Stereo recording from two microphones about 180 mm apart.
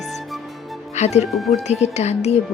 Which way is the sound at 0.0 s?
Centre (ahead or behind).